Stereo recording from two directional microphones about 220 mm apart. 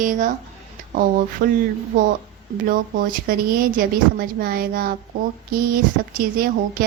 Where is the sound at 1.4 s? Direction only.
45° right (ahead or behind).